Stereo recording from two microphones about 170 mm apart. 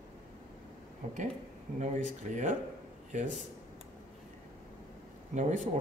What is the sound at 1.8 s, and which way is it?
Speech, 45° right (ahead or behind).